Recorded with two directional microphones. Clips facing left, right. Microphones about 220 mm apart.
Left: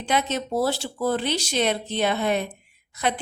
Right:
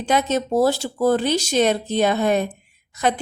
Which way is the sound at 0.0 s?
45° right (ahead or behind).